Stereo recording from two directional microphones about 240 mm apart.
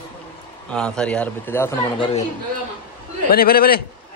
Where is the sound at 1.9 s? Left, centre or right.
Left.